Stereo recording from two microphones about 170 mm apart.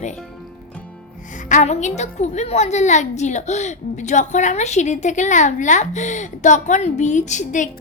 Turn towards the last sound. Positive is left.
turn(degrees=45)  # may be behind; listen again after turning